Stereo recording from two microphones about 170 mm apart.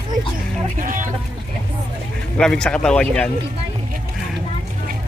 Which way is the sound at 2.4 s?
5° left (ahead or behind).